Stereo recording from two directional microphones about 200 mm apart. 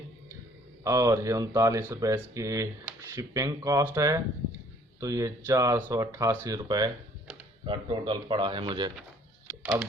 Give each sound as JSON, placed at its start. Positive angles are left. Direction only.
{"t": 0.9, "sound": "a man's voice", "side_deg": -15}